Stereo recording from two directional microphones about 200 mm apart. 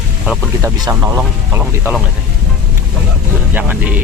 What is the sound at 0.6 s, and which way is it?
Speech, 15° right (ahead or behind).